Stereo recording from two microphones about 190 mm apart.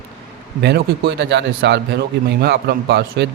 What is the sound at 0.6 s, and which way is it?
A man's voice, 65° right (ahead or behind).